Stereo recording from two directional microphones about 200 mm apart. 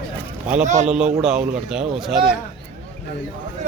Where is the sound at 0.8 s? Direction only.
5° right (ahead or behind).